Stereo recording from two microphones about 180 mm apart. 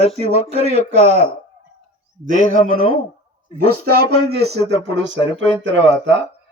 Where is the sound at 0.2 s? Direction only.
35° left (ahead or behind).